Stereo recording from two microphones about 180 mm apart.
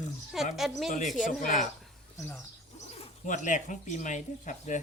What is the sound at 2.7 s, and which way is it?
Speech, 40° left (ahead or behind).